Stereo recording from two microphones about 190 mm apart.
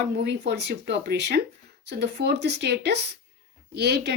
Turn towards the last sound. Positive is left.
turn(degrees=-60)  # may be behind; listen again after turning